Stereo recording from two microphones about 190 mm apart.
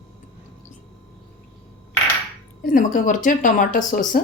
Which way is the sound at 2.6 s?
45° left (ahead or behind).